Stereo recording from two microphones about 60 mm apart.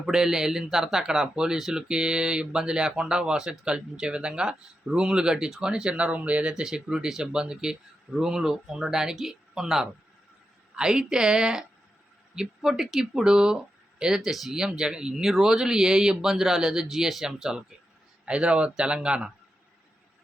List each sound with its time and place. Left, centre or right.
0.0 s speech: centre
6.5 s speech: centre
14.2 s speech: centre